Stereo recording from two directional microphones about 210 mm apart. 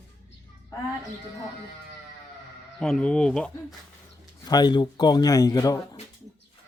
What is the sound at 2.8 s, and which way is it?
Speech, 5° left (ahead or behind).